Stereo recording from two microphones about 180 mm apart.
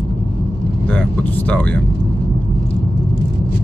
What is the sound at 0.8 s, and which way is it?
Vehicle, 10° left (ahead or behind).